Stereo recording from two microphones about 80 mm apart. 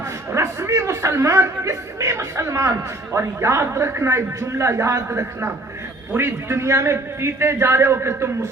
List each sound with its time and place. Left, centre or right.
0.3 s a man's voice: right